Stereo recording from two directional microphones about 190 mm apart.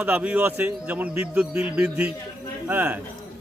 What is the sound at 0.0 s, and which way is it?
A man's voice, 5° right (ahead or behind).